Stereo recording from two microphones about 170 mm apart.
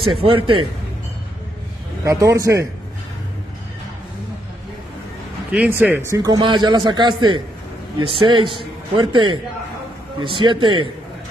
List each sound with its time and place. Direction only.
0.2 s a man's voice: 30° right (ahead or behind)
2.0 s a man's voice: 20° right (ahead or behind)
5.5 s a man's voice: 10° right (ahead or behind); by 10.9 s 30° right (ahead or behind)